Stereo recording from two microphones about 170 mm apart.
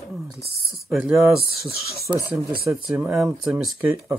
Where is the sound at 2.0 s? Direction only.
20° right (ahead or behind).